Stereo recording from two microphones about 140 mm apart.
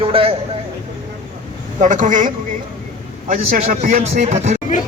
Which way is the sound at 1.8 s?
60° right (ahead or behind).